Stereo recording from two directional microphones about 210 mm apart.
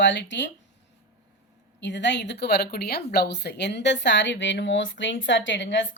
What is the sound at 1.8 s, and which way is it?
Speech, 55° left (ahead or behind).